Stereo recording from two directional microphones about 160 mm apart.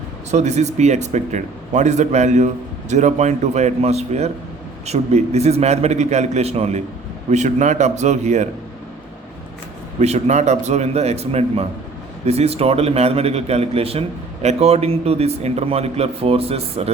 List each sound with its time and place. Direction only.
0.3 s speech: 45° right (ahead or behind)
10.0 s a man's voice: 45° right (ahead or behind)